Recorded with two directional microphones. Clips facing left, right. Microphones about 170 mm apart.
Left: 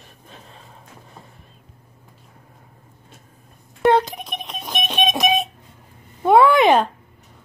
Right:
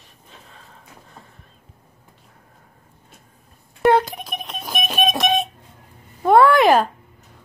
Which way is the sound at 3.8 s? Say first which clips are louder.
Even; centre (ahead or behind).